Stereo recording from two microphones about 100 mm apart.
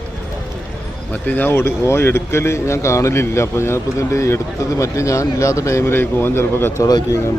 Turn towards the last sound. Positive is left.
turn(degrees=35)  # may be behind; listen again after turning